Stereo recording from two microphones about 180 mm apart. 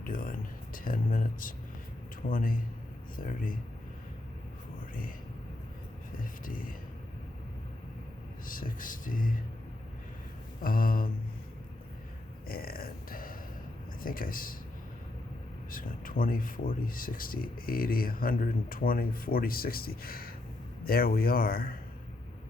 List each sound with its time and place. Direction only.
0.0 s speech: 50° left (ahead or behind)
6.4 s speech: 50° left (ahead or behind)
8.4 s speech: 50° left (ahead or behind)
10.6 s speech: 50° left (ahead or behind)
12.5 s a sound: 55° left (ahead or behind)
14.0 s speech: 50° left (ahead or behind)
15.7 s speech: 50° left (ahead or behind)